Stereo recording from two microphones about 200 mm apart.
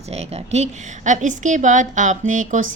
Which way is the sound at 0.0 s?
30° right (ahead or behind).